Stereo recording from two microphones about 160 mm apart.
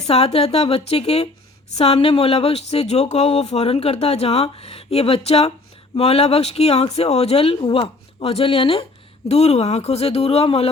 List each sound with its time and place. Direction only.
0.1 s speech: 40° left (ahead or behind)